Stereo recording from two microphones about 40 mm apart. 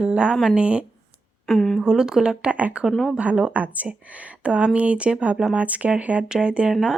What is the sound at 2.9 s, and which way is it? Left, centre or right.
Speech, centre.